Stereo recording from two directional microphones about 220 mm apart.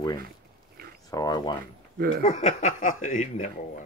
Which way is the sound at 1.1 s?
15° left (ahead or behind).